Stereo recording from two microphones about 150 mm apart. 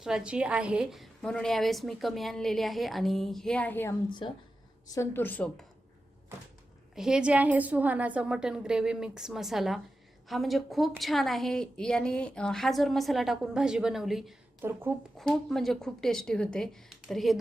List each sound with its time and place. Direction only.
0.0 s a woman's voice: 5° right (ahead or behind); by 3.9 s 15° left (ahead or behind)
4.2 s speech: 35° left (ahead or behind)
4.9 s a woman's voice: 15° left (ahead or behind)
6.9 s a woman's voice: 5° right (ahead or behind)
14.6 s a woman's voice: 15° right (ahead or behind)
15.2 s a woman's voice: centre (ahead or behind)